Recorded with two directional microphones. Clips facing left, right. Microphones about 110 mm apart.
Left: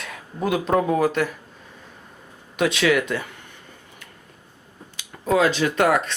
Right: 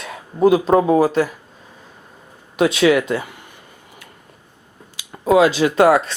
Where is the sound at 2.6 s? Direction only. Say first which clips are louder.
Right 5 dB; 25° right (ahead or behind).